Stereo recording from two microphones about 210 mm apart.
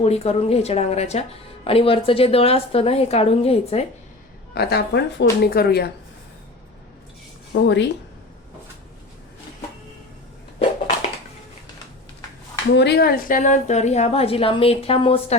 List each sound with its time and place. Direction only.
0.0 s a woman's voice: 30° left (ahead or behind)
4.5 s a woman's voice: 50° left (ahead or behind)
7.5 s speech: 55° left (ahead or behind)
12.7 s a woman's voice: 55° left (ahead or behind); by 15.4 s 25° left (ahead or behind)